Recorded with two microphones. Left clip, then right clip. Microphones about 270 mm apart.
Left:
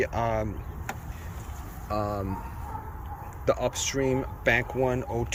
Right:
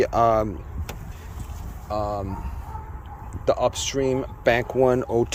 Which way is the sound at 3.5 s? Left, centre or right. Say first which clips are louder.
Right 7 dB; centre.